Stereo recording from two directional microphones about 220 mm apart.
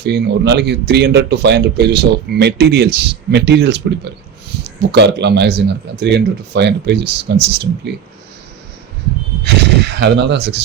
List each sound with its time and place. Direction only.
0.0 s speech: 50° right (ahead or behind)
9.4 s speech: 50° right (ahead or behind)